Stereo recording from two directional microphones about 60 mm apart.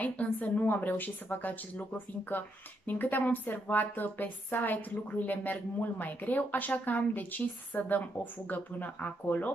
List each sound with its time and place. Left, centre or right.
0.0 s a woman's voice: left